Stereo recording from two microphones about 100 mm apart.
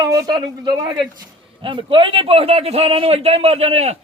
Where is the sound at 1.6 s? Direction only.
60° right (ahead or behind); by 3.9 s 90° right.